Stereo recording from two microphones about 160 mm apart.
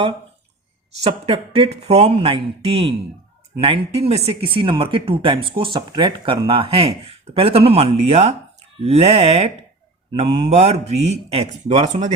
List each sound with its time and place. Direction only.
1.0 s speech: 40° right (ahead or behind)